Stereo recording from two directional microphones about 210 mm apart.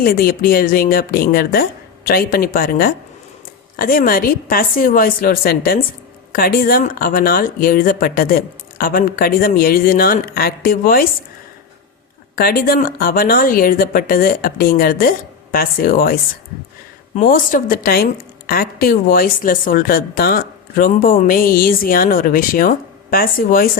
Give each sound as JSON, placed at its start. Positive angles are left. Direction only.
{"t": 0.0, "sound": "a woman's voice", "side_deg": 45}
{"t": 12.4, "sound": "a woman's voice", "side_deg": 45}
{"t": 17.2, "sound": "a woman's voice", "side_deg": 40}